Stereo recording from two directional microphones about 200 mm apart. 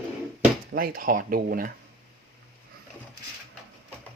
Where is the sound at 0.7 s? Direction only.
45° right (ahead or behind).